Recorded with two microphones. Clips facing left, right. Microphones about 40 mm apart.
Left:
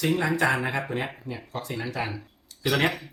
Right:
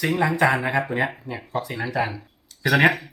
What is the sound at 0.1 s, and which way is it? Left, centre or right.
Speech, right.